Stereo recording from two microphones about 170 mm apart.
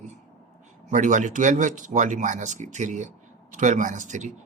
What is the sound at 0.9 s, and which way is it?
Speech, 45° right (ahead or behind).